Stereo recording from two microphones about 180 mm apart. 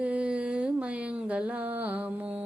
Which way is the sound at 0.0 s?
5° right (ahead or behind).